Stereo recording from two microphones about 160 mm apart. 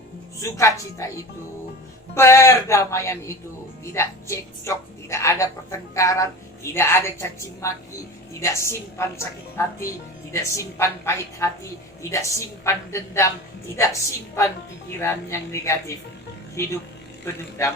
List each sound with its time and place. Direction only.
0.3 s a woman's voice: 20° left (ahead or behind)